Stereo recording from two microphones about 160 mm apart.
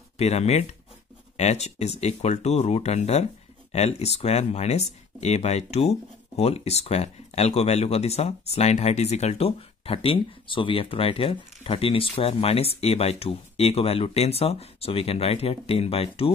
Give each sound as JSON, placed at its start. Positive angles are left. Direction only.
{"t": 0.2, "sound": "speech", "side_deg": 40}